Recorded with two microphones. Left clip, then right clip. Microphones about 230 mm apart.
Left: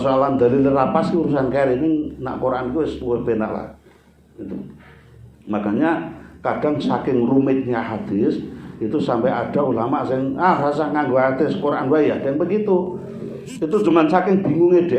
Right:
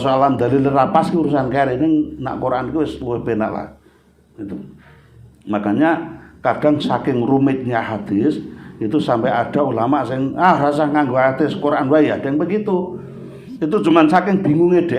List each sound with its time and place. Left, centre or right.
0.0 s a man's voice: right